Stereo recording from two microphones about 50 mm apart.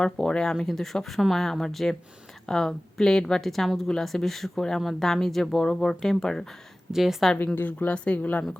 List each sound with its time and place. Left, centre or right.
0.0 s speech: centre
6.9 s speech: centre
7.3 s a woman's voice: left